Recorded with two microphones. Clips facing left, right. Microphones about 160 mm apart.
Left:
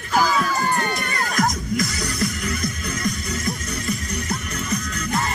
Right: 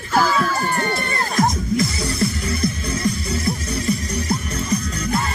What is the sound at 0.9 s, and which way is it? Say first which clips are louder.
Music: right 3 dB; 30° right (ahead or behind).